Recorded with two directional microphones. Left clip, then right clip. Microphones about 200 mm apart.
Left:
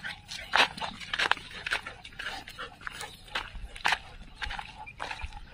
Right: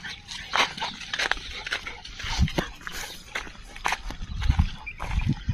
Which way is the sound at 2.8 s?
5° right (ahead or behind).